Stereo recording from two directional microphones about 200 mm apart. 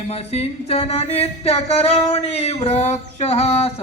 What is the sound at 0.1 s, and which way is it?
Singing, 30° left (ahead or behind).